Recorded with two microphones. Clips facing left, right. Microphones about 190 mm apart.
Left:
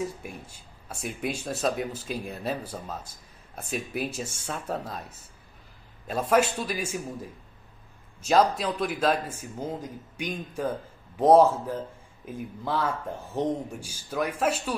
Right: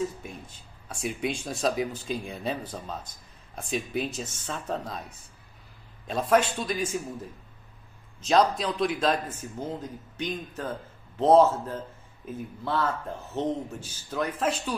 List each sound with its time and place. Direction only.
0.2 s a man's voice: 10° left (ahead or behind)
6.0 s a man's voice: 5° left (ahead or behind)
8.2 s a man's voice: 5° left (ahead or behind)